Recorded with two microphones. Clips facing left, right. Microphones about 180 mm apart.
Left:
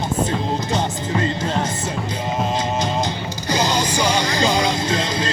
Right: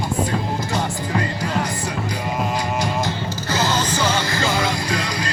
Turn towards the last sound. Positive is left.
turn(degrees=25)  # may be behind; listen again after turning